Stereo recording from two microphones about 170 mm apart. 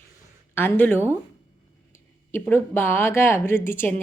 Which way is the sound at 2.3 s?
15° left (ahead or behind).